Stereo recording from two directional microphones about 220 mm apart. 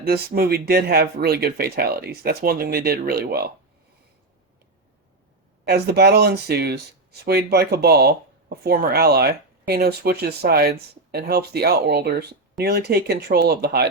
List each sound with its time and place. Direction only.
0.0 s speech: 45° right (ahead or behind)
5.6 s speech: 45° right (ahead or behind)